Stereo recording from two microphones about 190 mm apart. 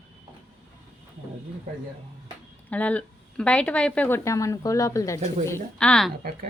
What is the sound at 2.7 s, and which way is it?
Speech, 5° left (ahead or behind).